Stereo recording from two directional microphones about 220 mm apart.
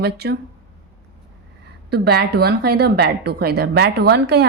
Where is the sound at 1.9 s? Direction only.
45° right (ahead or behind).